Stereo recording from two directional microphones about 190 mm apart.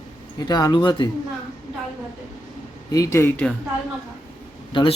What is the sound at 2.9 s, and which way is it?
Speech, 20° left (ahead or behind).